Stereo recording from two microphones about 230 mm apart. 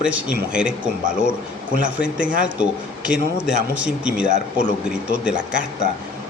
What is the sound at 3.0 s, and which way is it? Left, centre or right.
Speech, centre.